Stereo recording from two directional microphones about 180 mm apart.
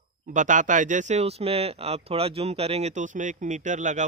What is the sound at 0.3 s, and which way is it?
Speech, 45° right (ahead or behind).